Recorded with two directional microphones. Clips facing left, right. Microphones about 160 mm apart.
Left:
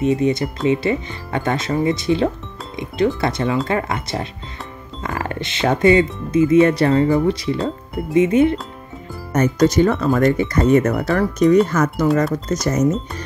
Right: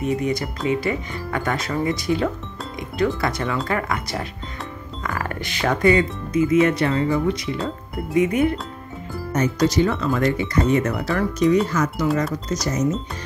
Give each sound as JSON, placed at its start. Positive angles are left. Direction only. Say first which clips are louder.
{"t": 0.0, "sound": "speech", "louder": "left 5 dB", "side_deg": 25}
{"t": 9.3, "sound": "speech", "louder": "left 4 dB", "side_deg": 50}